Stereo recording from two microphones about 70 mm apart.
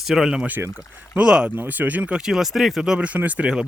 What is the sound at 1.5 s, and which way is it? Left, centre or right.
Speech, right.